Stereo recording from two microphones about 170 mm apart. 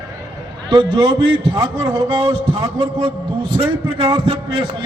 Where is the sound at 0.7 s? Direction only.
25° right (ahead or behind).